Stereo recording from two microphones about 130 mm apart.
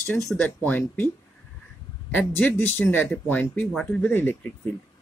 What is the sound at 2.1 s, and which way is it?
Speech, 15° left (ahead or behind).